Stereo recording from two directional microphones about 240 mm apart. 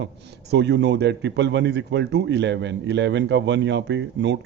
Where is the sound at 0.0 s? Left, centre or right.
Right.